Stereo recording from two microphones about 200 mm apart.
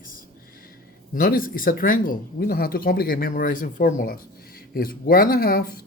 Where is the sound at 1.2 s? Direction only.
45° left (ahead or behind).